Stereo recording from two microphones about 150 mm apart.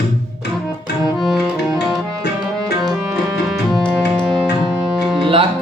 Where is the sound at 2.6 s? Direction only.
Centre (ahead or behind).